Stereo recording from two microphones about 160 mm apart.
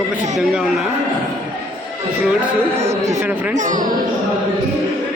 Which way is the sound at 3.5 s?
50° right (ahead or behind).